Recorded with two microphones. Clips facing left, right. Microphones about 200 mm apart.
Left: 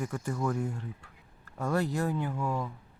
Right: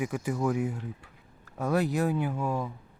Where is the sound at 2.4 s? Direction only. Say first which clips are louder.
Right 2 dB; 20° right (ahead or behind).